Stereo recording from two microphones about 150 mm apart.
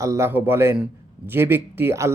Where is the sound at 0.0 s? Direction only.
20° right (ahead or behind).